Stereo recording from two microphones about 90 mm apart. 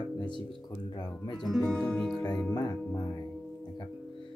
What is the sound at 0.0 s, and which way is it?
Music, 60° left (ahead or behind).